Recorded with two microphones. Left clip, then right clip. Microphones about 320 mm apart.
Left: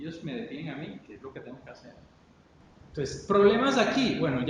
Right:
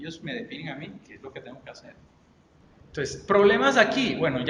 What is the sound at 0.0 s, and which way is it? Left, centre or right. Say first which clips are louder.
Speech: right 2 dB; right.